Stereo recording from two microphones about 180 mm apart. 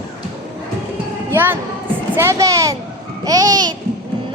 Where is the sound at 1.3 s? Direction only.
10° right (ahead or behind).